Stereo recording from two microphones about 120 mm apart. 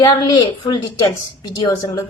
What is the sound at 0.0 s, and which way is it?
Speech, 35° left (ahead or behind).